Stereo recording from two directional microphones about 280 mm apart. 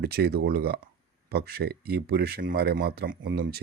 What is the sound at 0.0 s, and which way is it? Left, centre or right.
Speech, right.